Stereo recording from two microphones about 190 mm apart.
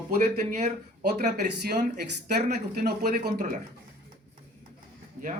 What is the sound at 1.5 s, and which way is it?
Speech, 55° right (ahead or behind).